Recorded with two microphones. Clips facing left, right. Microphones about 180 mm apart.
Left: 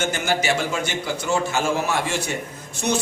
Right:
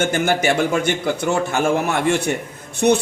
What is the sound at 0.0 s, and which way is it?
A man's voice, 55° right (ahead or behind).